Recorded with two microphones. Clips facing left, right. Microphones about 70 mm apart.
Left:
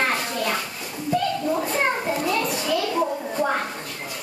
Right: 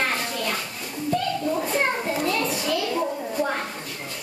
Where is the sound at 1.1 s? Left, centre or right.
Centre.